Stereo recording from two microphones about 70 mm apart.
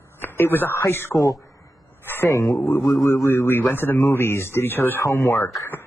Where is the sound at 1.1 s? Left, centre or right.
Left.